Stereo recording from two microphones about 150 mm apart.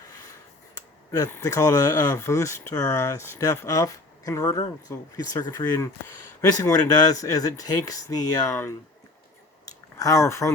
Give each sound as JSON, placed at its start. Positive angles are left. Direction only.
{"t": 1.1, "sound": "speech", "side_deg": 20}
{"t": 10.0, "sound": "speech", "side_deg": 20}